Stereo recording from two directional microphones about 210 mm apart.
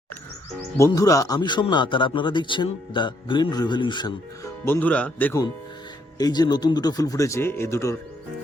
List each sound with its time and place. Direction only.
0.8 s a man's voice: 15° left (ahead or behind)
4.6 s speech: 10° left (ahead or behind)